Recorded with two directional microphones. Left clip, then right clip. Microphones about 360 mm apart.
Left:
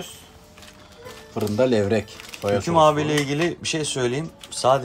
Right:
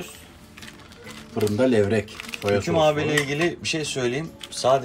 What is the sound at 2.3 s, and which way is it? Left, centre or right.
Speech, centre.